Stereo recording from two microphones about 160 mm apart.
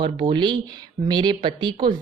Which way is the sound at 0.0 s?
30° right (ahead or behind).